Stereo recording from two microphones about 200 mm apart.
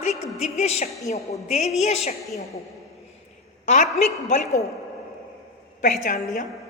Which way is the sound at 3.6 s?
35° left (ahead or behind).